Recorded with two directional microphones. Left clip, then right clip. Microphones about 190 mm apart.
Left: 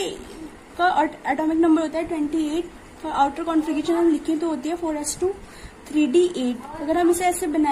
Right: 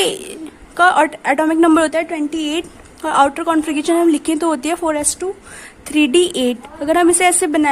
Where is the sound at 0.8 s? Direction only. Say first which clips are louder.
Right 8 dB; 40° right (ahead or behind).